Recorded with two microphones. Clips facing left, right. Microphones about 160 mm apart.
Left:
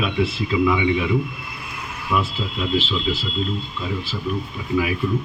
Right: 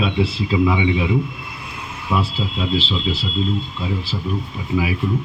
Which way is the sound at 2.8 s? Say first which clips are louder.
Right 1 dB; 30° right (ahead or behind).